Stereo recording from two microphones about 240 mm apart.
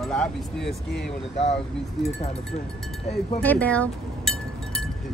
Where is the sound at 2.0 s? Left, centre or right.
Left.